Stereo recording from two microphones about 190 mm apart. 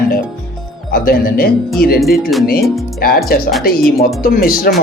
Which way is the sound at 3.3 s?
50° left (ahead or behind).